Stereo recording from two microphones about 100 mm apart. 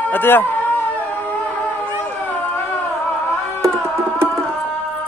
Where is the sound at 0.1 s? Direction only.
20° left (ahead or behind).